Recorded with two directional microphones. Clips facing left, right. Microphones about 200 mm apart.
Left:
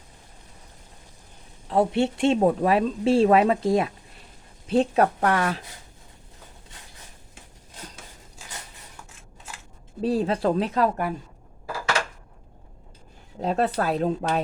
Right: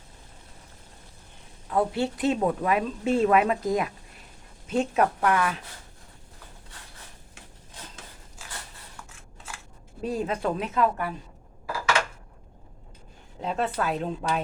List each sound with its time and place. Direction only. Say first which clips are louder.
1.7 s a woman's voice: left 4 dB; 25° left (ahead or behind)
10.0 s a woman's voice: left 5 dB; 30° left (ahead or behind)
13.4 s a woman's voice: left 4 dB; 40° left (ahead or behind)